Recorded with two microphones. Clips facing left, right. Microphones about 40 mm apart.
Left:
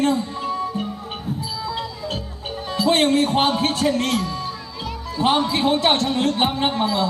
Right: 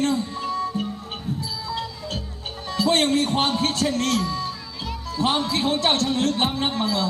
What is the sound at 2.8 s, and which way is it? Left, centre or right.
A man's voice, left.